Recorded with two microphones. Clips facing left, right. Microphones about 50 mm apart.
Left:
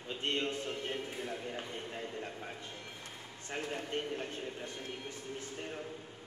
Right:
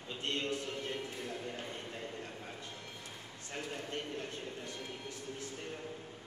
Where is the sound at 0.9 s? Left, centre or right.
Left.